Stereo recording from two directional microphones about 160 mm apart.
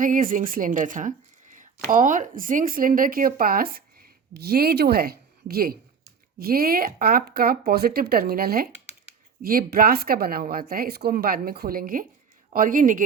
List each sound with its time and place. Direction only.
0.0 s a woman's voice: 60° right (ahead or behind)